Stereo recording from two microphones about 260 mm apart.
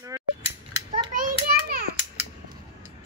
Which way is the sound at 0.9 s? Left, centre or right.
Right.